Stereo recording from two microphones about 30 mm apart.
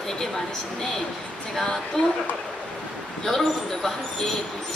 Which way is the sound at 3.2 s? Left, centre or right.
Centre.